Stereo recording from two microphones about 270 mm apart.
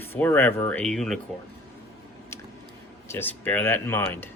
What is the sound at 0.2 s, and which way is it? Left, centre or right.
Speech, centre.